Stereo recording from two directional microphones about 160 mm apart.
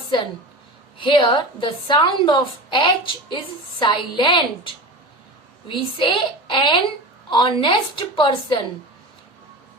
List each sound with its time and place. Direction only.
0.9 s a woman's voice: 30° left (ahead or behind)